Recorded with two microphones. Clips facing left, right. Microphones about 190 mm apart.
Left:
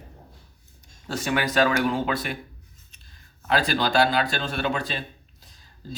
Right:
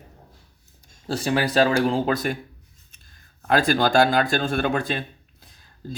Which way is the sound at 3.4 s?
50° right (ahead or behind).